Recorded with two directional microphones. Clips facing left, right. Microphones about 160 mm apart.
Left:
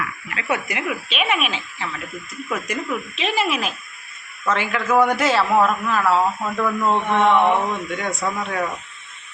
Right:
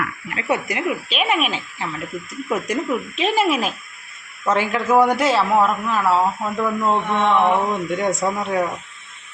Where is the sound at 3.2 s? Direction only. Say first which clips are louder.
Right 4 dB; 45° right (ahead or behind).